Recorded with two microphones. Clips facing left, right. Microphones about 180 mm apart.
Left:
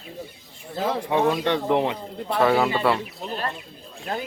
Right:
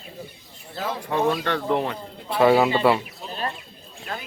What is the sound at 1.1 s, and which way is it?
Speech, 20° left (ahead or behind).